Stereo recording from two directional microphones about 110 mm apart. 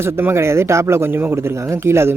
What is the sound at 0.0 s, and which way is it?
Speech, 20° right (ahead or behind).